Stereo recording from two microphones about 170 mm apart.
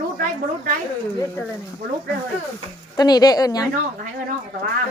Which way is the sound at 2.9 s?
25° left (ahead or behind).